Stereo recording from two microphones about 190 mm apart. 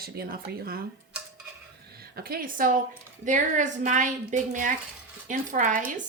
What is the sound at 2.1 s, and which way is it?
Speech, 50° right (ahead or behind).